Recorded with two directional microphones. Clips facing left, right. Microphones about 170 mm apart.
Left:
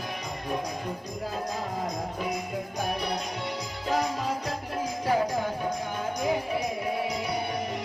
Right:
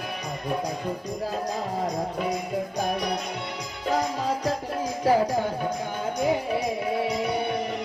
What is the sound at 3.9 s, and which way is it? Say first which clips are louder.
Music: right 2 dB; 30° right (ahead or behind).